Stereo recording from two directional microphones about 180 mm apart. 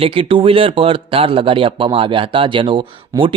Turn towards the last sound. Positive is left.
turn(degrees=-30)  # may be behind; listen again after turning